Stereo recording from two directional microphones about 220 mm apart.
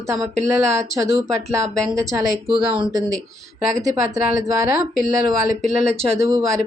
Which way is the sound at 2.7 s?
20° right (ahead or behind).